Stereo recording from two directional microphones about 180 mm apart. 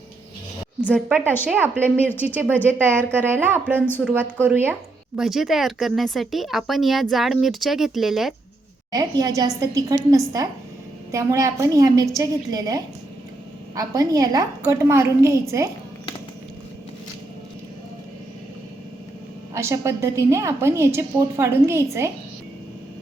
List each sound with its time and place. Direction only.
0.9 s a woman's voice: centre (ahead or behind)
2.3 s a woman's voice: 10° right (ahead or behind)
3.8 s speech: 10° left (ahead or behind)
4.0 s a woman's voice: 10° right (ahead or behind)
8.9 s a woman's voice: 20° right (ahead or behind)
19.5 s a woman's voice: 15° right (ahead or behind)